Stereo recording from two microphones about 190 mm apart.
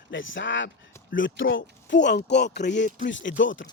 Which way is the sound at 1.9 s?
65° left (ahead or behind).